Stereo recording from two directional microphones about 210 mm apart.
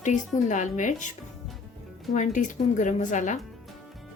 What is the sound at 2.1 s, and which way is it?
Speech, 35° left (ahead or behind).